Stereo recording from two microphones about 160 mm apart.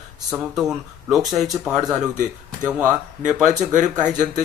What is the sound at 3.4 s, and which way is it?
Speech, 50° right (ahead or behind).